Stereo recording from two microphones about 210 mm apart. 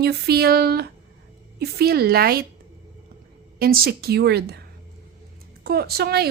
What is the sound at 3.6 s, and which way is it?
A woman's voice, 45° right (ahead or behind).